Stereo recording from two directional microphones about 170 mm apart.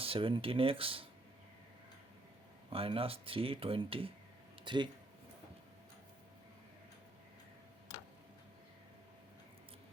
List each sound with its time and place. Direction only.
0.0 s speech: 30° right (ahead or behind)
2.6 s speech: 35° right (ahead or behind)